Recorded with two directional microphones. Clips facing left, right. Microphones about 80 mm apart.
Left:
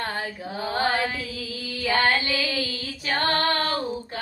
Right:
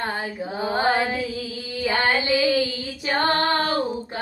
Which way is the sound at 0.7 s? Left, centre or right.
Right.